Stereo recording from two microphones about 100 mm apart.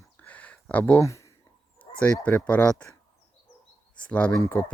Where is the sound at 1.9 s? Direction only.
60° left (ahead or behind).